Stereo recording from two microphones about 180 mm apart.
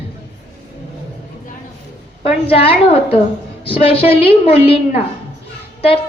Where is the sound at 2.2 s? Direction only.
30° left (ahead or behind).